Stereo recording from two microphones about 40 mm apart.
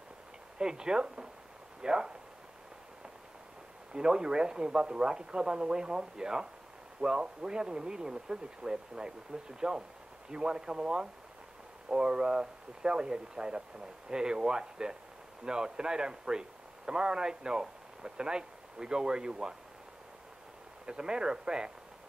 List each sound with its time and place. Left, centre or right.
0.6 s speech: centre
3.9 s speech: centre
20.8 s speech: centre